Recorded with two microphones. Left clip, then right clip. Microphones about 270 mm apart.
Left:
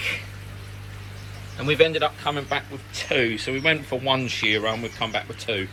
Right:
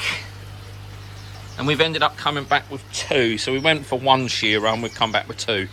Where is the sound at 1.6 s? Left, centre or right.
Centre.